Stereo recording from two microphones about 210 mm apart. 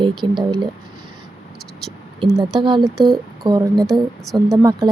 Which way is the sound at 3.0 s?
Centre (ahead or behind).